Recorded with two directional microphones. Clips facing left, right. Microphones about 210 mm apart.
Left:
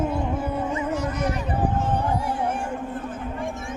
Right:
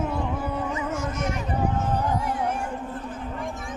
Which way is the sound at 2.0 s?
30° left (ahead or behind).